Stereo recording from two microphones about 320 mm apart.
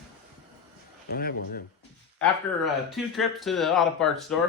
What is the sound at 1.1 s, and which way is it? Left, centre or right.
Speech, left.